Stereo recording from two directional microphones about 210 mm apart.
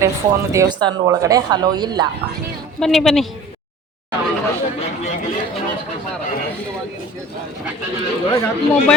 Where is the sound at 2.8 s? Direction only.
Centre (ahead or behind).